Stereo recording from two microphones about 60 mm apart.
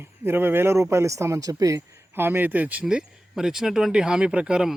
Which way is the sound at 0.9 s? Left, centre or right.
Right.